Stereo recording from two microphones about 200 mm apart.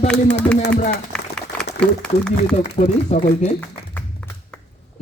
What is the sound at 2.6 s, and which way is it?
Speech, 35° left (ahead or behind).